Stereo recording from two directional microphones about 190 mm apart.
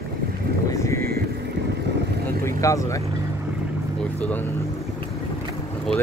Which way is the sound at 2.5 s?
15° left (ahead or behind).